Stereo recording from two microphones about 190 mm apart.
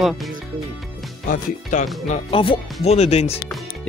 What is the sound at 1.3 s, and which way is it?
Speech, 40° left (ahead or behind).